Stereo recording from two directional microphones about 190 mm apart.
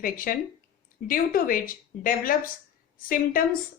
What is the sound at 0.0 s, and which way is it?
A woman's voice, 45° left (ahead or behind).